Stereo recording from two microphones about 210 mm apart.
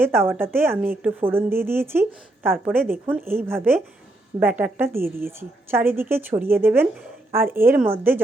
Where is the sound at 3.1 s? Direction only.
10° right (ahead or behind).